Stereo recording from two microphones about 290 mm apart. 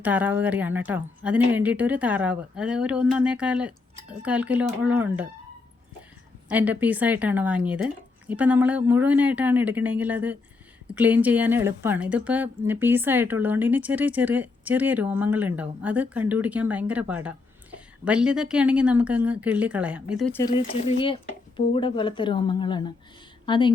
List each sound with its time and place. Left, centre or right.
0.0 s speech: centre
6.5 s speech: centre
20.4 s speech: centre